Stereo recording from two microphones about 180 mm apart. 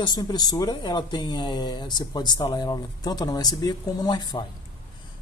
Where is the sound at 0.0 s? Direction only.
20° left (ahead or behind).